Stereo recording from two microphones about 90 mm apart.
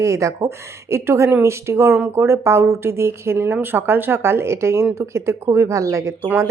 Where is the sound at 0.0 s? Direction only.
35° right (ahead or behind).